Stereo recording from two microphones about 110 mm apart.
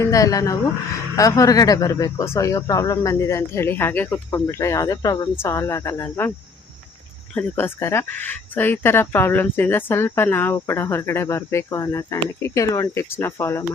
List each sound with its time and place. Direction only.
0.0 s speech: 30° left (ahead or behind)
7.3 s speech: 20° left (ahead or behind)